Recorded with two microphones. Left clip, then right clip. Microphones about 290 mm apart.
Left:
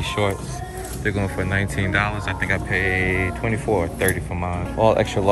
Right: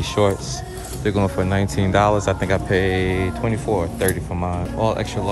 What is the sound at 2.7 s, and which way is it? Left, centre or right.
Speech, right.